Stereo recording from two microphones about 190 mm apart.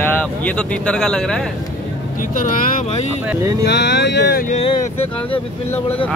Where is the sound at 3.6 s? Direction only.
65° left (ahead or behind).